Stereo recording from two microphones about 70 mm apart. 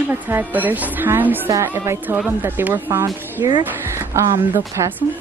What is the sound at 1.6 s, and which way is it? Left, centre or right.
Speech, right.